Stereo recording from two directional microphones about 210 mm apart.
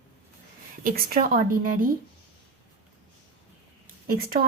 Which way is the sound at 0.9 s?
45° right (ahead or behind).